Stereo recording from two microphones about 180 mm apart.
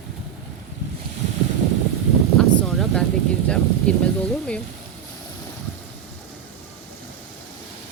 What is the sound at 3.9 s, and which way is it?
Speech, 5° left (ahead or behind).